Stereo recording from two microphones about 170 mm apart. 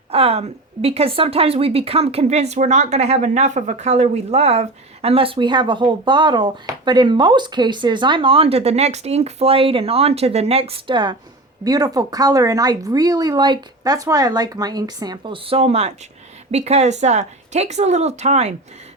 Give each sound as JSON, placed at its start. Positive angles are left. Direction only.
{"t": 0.1, "sound": "a woman's voice", "side_deg": -35}